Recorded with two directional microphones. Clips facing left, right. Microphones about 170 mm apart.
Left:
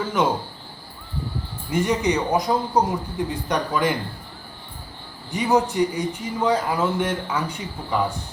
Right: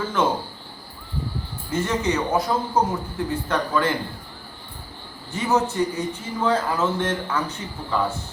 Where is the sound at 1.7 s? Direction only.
15° left (ahead or behind).